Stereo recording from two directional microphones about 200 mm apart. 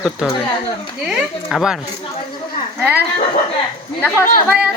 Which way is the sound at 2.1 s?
25° left (ahead or behind).